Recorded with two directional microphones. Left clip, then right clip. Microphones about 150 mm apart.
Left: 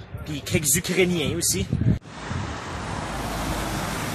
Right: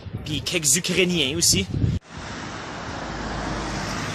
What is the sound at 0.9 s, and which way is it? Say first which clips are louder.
Speech: left 1 dB; 15° right (ahead or behind).